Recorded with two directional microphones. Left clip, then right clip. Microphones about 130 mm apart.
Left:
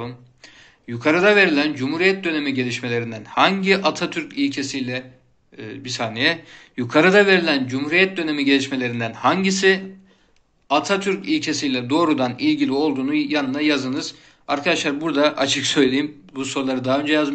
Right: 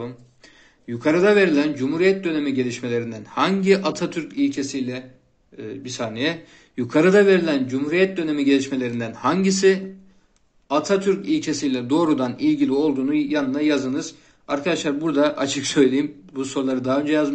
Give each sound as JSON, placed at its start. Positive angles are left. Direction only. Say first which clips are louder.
{"t": 0.8, "sound": "a man's voice", "louder": "left 1 dB", "side_deg": -40}